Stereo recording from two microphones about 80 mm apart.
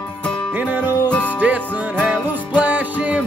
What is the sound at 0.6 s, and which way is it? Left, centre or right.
Music, right.